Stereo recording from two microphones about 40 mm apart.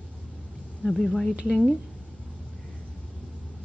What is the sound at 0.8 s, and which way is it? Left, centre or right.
Speech, centre.